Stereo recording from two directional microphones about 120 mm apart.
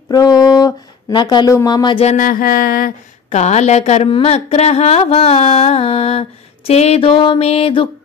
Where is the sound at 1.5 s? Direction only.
35° left (ahead or behind).